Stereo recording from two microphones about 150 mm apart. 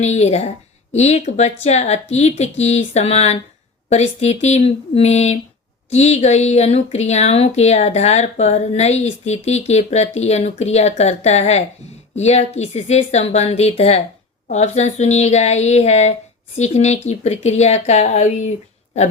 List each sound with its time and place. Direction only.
0.0 s a woman's voice: 45° left (ahead or behind)